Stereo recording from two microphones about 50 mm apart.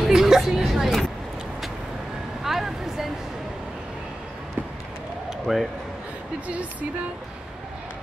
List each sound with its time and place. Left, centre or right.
0.0 s a woman's voice: centre
2.4 s vehicle: centre
5.5 s speech: centre
6.4 s speech: right